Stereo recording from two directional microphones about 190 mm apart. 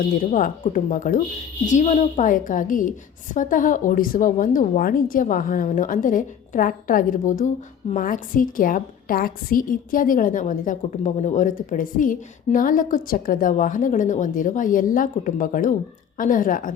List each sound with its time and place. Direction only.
0.0 s speech: 45° left (ahead or behind)